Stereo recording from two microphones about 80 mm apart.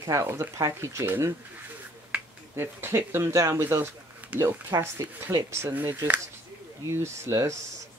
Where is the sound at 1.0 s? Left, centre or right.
Right.